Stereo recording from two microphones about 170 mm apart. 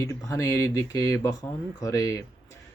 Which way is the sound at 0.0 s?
20° left (ahead or behind).